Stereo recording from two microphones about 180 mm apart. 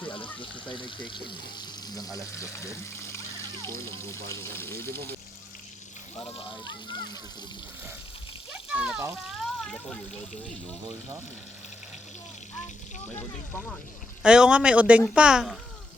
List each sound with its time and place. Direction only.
0.7 s speech: 25° left (ahead or behind)
6.4 s speech: 25° left (ahead or behind)
8.7 s a child's voice: 5° right (ahead or behind)
14.2 s speech: 5° right (ahead or behind)